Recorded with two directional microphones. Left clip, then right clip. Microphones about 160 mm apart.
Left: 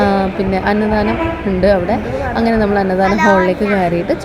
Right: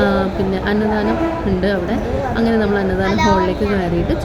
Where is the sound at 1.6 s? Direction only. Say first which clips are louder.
Left 10 dB; 30° left (ahead or behind).